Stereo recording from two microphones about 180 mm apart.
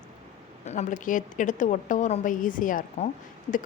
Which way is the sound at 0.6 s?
40° left (ahead or behind).